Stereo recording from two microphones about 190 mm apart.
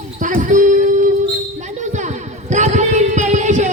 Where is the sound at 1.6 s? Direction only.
40° right (ahead or behind).